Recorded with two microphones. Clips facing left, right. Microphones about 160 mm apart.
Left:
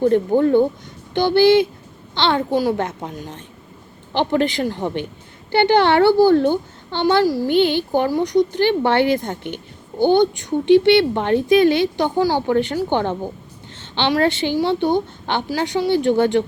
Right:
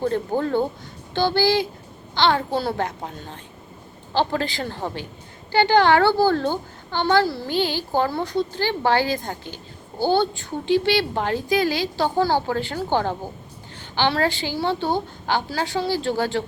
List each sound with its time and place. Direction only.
0.1 s a woman's voice: 20° left (ahead or behind)